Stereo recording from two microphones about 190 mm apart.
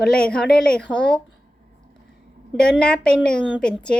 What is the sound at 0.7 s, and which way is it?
Speech, 5° left (ahead or behind).